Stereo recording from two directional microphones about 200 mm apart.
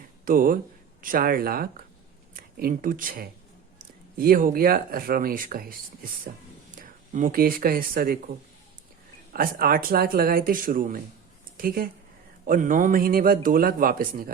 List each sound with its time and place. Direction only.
0.3 s speech: 45° right (ahead or behind)
6.7 s speech: 40° right (ahead or behind)